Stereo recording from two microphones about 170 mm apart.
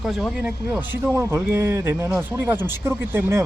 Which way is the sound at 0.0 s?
Centre (ahead or behind).